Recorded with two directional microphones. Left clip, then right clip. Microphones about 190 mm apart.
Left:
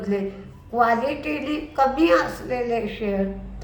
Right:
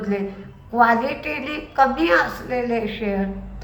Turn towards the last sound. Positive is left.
turn(degrees=15)  # may be behind; listen again after turning